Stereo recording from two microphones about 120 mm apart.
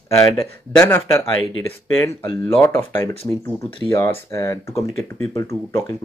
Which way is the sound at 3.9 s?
25° left (ahead or behind).